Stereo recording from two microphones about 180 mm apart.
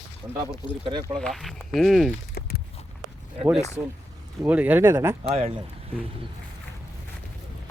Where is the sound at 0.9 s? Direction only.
30° right (ahead or behind).